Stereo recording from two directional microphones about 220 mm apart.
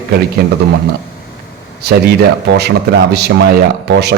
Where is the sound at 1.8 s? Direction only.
45° right (ahead or behind).